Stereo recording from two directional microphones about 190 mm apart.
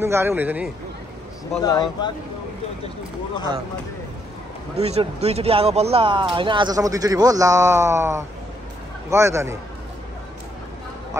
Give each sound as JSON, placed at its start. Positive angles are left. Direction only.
{"t": 0.0, "sound": "a man's voice", "side_deg": -10}
{"t": 1.6, "sound": "speech", "side_deg": 20}
{"t": 4.7, "sound": "a man's voice", "side_deg": -35}